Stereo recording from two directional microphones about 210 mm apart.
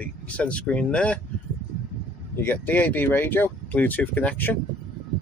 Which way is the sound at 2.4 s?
10° left (ahead or behind).